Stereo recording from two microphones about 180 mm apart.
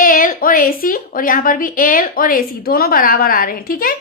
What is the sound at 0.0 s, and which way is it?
A woman's voice, 50° left (ahead or behind).